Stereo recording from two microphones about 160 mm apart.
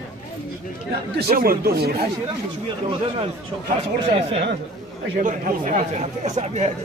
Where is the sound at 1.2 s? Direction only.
70° right (ahead or behind).